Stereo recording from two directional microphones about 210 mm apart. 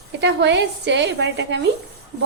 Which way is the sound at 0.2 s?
55° right (ahead or behind).